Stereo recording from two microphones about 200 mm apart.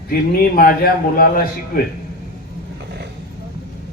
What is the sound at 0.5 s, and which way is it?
A man's voice, 45° left (ahead or behind).